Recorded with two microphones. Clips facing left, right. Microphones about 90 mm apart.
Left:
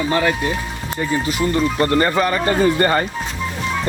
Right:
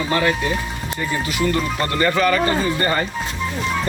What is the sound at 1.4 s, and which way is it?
Speech, 25° left (ahead or behind).